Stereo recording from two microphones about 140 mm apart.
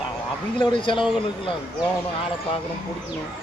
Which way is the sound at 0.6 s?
35° left (ahead or behind).